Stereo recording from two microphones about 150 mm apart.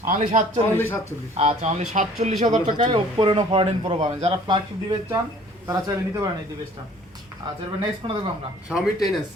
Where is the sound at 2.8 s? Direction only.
40° right (ahead or behind).